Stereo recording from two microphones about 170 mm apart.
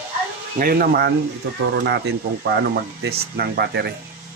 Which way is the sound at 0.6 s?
60° right (ahead or behind).